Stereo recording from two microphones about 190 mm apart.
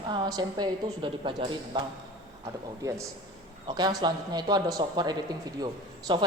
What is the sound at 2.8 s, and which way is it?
A man's voice, 15° right (ahead or behind).